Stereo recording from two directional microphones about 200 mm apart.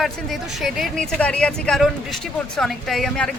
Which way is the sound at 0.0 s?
Centre (ahead or behind).